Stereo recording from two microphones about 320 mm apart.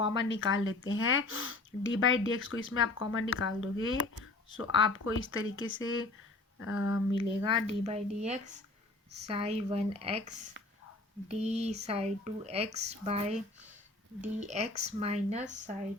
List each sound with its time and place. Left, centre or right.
0.2 s speech: left
7.2 s speech: centre